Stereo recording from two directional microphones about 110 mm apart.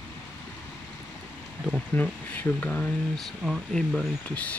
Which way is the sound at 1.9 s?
15° left (ahead or behind).